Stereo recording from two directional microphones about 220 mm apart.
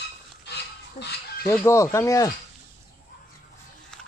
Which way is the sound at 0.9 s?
50° left (ahead or behind).